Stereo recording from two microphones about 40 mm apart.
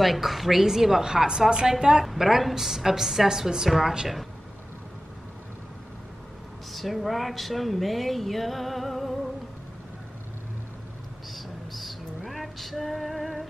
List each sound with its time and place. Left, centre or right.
0.0 s a woman's voice: centre
6.7 s speech: centre
11.3 s vehicle: centre
12.3 s female singing: centre